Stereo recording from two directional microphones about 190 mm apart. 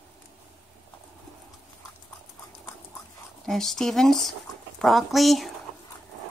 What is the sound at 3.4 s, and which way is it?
Speech, centre (ahead or behind).